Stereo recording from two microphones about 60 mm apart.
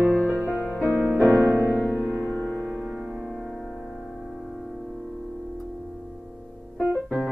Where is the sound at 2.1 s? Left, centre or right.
Centre.